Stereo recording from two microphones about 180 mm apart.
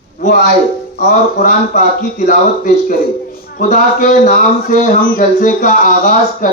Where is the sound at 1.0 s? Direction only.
45° left (ahead or behind).